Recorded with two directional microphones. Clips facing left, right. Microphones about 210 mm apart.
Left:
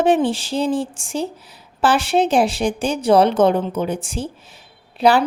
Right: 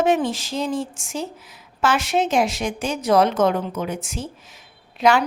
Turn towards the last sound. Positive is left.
turn(degrees=35)  # may be behind; listen again after turning